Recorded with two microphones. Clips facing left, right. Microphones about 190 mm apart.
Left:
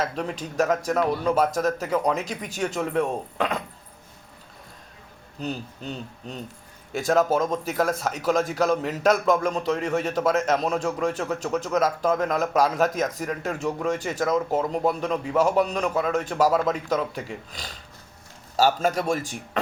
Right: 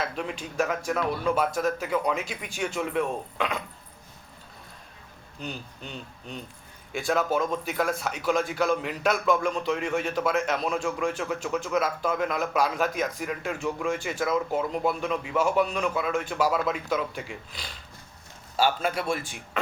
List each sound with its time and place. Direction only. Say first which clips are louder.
0.0 s a man's voice: left 3 dB; 40° left (ahead or behind)
5.4 s a man's voice: left 6 dB; 40° left (ahead or behind)